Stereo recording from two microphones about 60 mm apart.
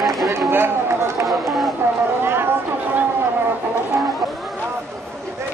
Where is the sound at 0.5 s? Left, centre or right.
Right.